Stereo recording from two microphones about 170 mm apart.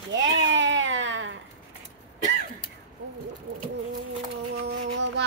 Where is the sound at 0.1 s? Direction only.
90° right.